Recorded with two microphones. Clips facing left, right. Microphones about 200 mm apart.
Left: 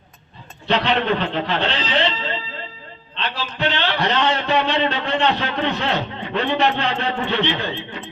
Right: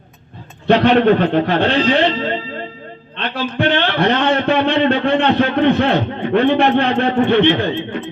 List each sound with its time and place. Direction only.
0.7 s a man's voice: 55° right (ahead or behind)